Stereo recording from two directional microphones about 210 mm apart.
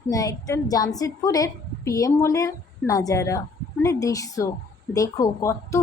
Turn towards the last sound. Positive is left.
turn(degrees=15)  # may be behind; listen again after turning